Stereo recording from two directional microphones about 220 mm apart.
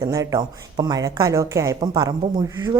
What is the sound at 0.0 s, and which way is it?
Speech, 15° right (ahead or behind).